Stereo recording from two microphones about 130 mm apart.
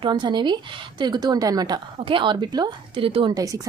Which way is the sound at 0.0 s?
35° right (ahead or behind).